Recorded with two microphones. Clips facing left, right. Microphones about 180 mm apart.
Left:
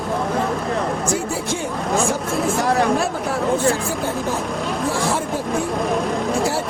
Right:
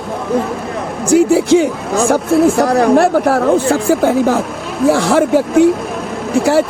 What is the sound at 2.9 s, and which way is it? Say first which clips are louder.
Speech: right 10 dB; 75° right (ahead or behind).